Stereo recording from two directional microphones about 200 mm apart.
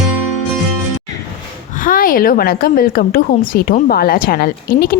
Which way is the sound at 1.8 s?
45° left (ahead or behind).